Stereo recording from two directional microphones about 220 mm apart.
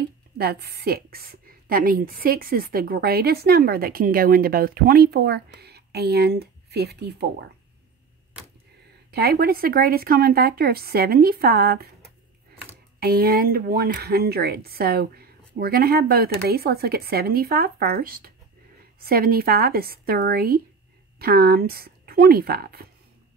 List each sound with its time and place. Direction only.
0.4 s a woman's voice: 45° right (ahead or behind)
9.1 s a woman's voice: 45° right (ahead or behind)
13.0 s a woman's voice: 45° right (ahead or behind)